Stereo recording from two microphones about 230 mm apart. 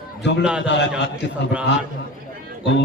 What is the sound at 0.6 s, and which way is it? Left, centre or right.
Speech, left.